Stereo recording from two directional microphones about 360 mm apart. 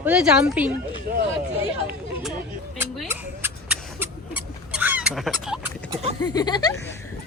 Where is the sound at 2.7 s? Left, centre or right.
Centre.